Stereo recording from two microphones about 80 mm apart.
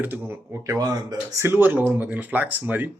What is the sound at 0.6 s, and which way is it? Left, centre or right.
Speech, right.